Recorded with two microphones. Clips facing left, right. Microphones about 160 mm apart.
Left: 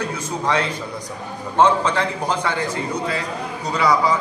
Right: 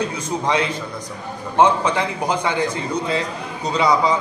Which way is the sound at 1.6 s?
15° right (ahead or behind).